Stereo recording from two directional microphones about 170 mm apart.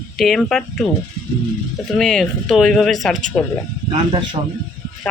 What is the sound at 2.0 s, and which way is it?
Speech, centre (ahead or behind).